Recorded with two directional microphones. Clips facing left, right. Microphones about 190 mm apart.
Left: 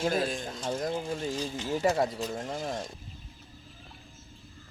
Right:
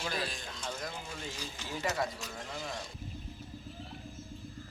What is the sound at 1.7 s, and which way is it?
Speech, 40° left (ahead or behind).